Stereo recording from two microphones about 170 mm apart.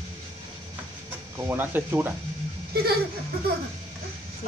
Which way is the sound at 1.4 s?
10° right (ahead or behind).